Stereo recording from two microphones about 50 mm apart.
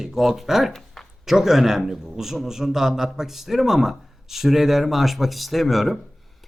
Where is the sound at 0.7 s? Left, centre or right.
Centre.